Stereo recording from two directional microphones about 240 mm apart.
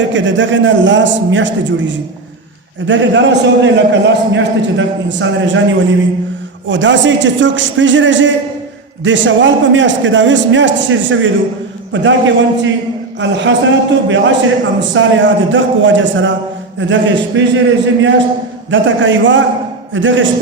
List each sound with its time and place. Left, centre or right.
0.0 s a man's voice: right